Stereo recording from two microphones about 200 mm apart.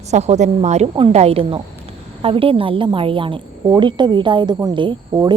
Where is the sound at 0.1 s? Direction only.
35° right (ahead or behind).